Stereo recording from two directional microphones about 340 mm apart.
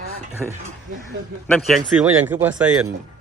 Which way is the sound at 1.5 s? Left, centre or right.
Centre.